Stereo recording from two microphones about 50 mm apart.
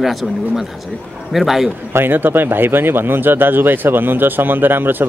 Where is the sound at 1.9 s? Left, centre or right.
Right.